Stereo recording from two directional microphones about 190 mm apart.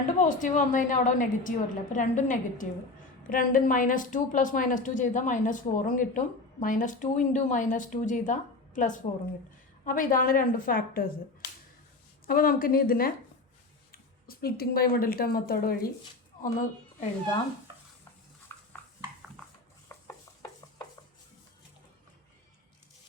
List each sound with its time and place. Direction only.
0.2 s a woman's voice: 45° left (ahead or behind)
12.2 s a woman's voice: 50° left (ahead or behind)
19.9 s a sound: 10° left (ahead or behind)